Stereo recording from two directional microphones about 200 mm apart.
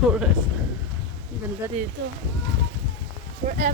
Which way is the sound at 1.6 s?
15° right (ahead or behind).